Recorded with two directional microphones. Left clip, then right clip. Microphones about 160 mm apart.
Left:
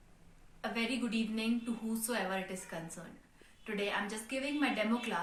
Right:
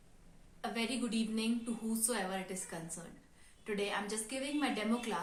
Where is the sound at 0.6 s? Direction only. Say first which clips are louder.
Left 2 dB; 25° right (ahead or behind).